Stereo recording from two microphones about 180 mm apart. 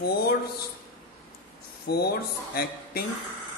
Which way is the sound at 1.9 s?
60° left (ahead or behind).